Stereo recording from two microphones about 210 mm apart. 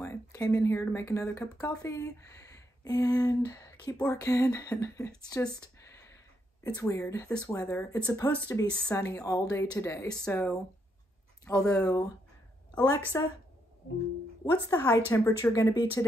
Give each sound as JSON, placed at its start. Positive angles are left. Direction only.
{"t": 0.0, "sound": "speech", "side_deg": 15}
{"t": 6.6, "sound": "speech", "side_deg": 15}
{"t": 8.7, "sound": "speech", "side_deg": 5}
{"t": 9.0, "sound": "speech", "side_deg": 15}
{"t": 10.1, "sound": "speech", "side_deg": 5}
{"t": 13.1, "sound": "speech", "side_deg": 15}
{"t": 14.4, "sound": "speech", "side_deg": 15}